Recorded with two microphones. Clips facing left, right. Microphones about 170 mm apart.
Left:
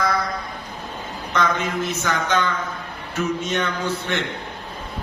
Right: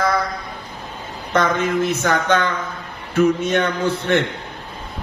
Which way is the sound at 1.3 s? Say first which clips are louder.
Right 4 dB; 55° right (ahead or behind).